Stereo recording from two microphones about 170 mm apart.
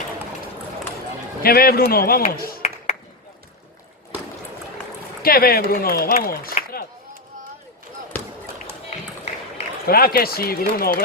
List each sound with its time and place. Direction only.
1.4 s a man's voice: 60° left (ahead or behind)
2.6 s a sound: 40° left (ahead or behind)
5.2 s a man's voice: 60° left (ahead or behind)
8.9 s run: 40° left (ahead or behind)
9.8 s a man's voice: 60° left (ahead or behind)